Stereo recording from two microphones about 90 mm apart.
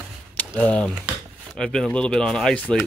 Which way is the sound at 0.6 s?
10° left (ahead or behind).